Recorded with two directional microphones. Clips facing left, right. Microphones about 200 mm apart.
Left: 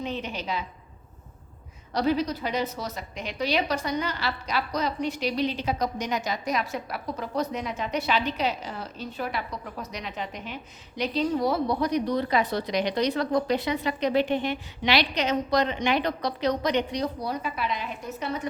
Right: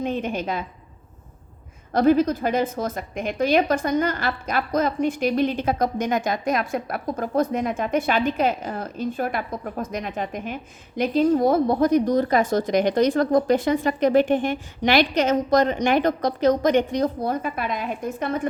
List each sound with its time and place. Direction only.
0.0 s a woman's voice: 50° right (ahead or behind)
1.9 s a woman's voice: 50° right (ahead or behind)